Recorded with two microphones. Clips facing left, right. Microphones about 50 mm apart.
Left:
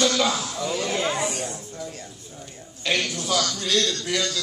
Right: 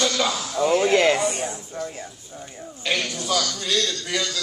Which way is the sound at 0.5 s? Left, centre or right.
Right.